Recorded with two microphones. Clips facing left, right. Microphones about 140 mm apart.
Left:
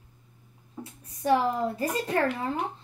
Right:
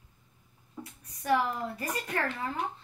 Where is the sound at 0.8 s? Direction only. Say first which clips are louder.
Left 4 dB; 25° left (ahead or behind).